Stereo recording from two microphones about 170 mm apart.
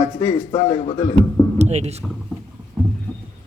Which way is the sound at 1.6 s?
40° right (ahead or behind).